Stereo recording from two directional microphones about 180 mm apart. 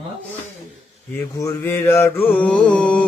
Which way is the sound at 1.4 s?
15° left (ahead or behind).